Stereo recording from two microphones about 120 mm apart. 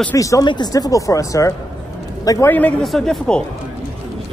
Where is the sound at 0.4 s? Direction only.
40° left (ahead or behind).